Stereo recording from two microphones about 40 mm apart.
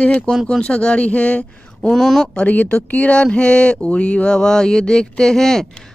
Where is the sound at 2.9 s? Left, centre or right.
Left.